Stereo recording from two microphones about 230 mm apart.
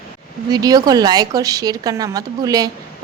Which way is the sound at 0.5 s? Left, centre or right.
Centre.